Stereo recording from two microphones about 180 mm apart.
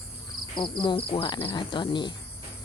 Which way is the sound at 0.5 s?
25° left (ahead or behind).